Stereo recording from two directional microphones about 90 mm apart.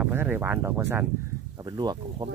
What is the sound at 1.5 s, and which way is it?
Speech, 55° right (ahead or behind).